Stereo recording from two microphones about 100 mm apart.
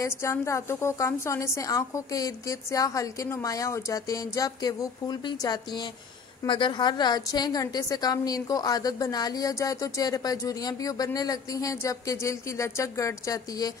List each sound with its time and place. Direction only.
0.0 s a woman's voice: 30° left (ahead or behind)
6.4 s a woman's voice: 55° left (ahead or behind); by 13.7 s 35° left (ahead or behind)